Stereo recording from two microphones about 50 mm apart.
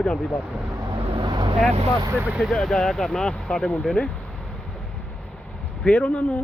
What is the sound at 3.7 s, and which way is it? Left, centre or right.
Speech, left.